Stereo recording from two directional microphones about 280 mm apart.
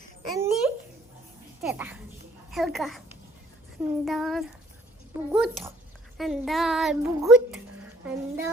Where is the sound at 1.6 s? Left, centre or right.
Centre.